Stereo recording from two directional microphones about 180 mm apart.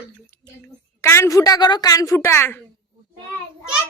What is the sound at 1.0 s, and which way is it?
Speech, 15° left (ahead or behind).